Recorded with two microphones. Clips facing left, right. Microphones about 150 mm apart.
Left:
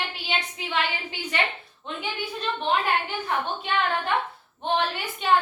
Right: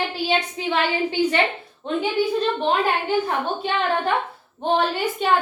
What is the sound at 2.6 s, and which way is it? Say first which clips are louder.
Speech: right 4 dB; 35° right (ahead or behind).